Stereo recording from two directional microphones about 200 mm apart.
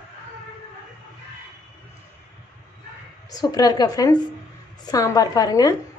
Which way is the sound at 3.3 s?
20° left (ahead or behind).